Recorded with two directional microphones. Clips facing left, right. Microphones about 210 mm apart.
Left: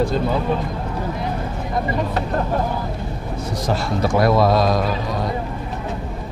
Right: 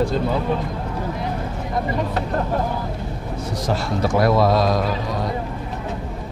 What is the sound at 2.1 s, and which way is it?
Speech, 20° left (ahead or behind).